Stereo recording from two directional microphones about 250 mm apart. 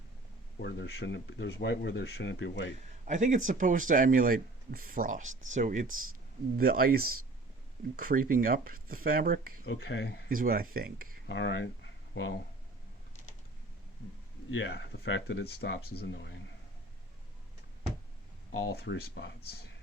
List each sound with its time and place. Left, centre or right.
0.6 s speech: left
3.1 s speech: right
9.6 s speech: left
10.2 s speech: right
11.3 s speech: left
14.5 s speech: left
18.5 s speech: left